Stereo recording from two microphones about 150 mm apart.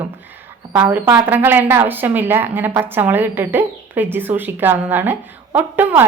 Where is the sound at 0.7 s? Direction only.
10° right (ahead or behind).